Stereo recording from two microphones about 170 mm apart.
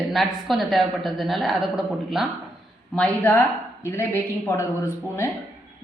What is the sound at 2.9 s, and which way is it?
Speech, 10° left (ahead or behind).